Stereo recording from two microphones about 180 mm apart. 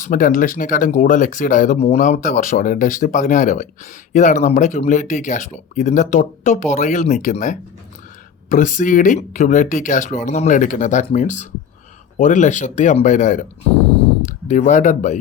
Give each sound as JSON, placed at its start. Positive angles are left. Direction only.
{"t": 0.0, "sound": "speech", "side_deg": 50}